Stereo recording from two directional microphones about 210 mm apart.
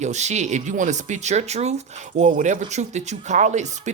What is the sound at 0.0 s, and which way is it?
Speech, 35° right (ahead or behind).